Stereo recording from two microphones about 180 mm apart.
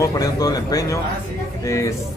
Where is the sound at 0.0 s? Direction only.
20° left (ahead or behind).